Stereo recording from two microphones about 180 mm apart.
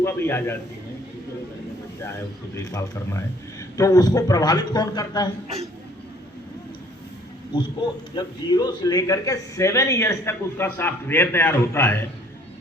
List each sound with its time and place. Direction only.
0.0 s speech: 15° left (ahead or behind)
2.6 s a man's voice: 15° left (ahead or behind)
8.1 s speech: 20° left (ahead or behind)